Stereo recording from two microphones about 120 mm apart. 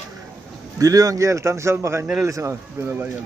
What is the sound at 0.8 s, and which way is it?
Speech, 30° right (ahead or behind).